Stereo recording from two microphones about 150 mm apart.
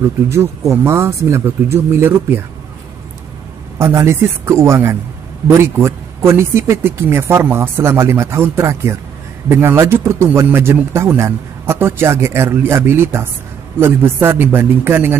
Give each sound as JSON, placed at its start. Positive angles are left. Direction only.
{"t": 0.0, "sound": "speech", "side_deg": -20}
{"t": 3.7, "sound": "speech", "side_deg": -15}